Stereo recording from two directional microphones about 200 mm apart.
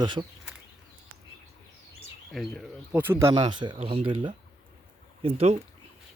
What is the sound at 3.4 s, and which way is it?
Speech, 25° right (ahead or behind).